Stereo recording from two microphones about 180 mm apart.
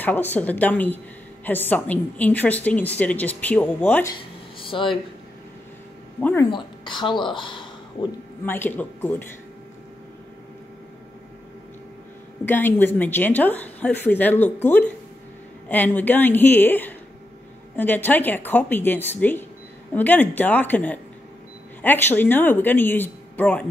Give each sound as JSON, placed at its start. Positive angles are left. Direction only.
{"t": 0.0, "sound": "a woman's voice", "side_deg": 10}
{"t": 4.1, "sound": "a sound", "side_deg": 30}
{"t": 6.5, "sound": "speech", "side_deg": 25}
{"t": 8.5, "sound": "a woman's voice", "side_deg": 10}
{"t": 12.4, "sound": "a woman's voice", "side_deg": 10}